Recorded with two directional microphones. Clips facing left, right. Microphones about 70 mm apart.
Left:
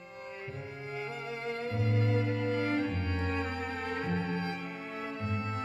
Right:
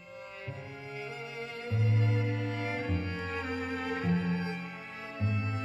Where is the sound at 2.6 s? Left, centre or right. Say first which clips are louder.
Left 3 dB; centre.